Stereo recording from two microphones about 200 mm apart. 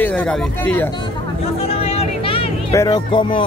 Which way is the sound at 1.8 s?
30° left (ahead or behind).